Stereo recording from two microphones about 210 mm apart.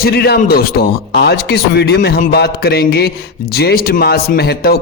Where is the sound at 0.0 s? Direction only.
50° left (ahead or behind).